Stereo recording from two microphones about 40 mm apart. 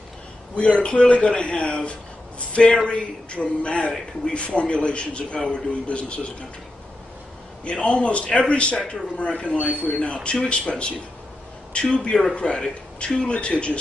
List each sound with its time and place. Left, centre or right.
0.6 s a man's voice: left
7.6 s a man's voice: left